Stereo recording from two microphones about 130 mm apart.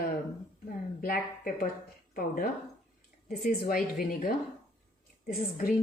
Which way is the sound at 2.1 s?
90° left.